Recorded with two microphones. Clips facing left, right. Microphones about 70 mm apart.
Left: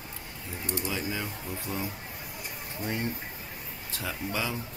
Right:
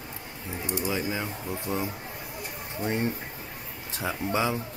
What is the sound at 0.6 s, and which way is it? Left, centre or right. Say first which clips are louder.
Speech: right 4 dB; centre.